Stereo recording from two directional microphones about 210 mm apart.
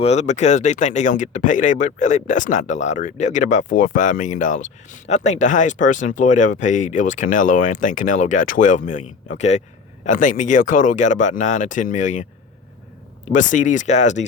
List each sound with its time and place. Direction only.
0.0 s speech: 30° left (ahead or behind)
13.3 s speech: 35° left (ahead or behind)